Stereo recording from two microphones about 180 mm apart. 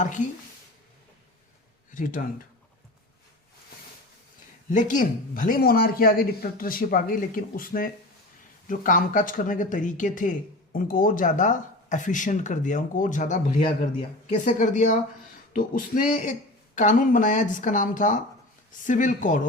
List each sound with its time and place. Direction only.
1.9 s speech: 45° left (ahead or behind)
4.7 s speech: 45° left (ahead or behind)